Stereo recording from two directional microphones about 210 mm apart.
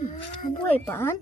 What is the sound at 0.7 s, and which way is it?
Speech, 10° left (ahead or behind).